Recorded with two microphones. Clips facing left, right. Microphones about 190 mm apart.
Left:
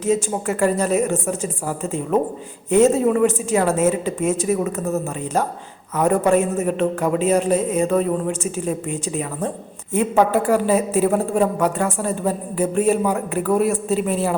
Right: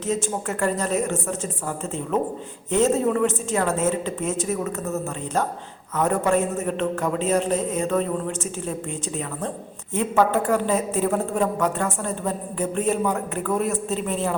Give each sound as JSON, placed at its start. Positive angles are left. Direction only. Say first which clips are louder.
{"t": 0.0, "sound": "a woman's voice", "louder": "left 5 dB", "side_deg": 15}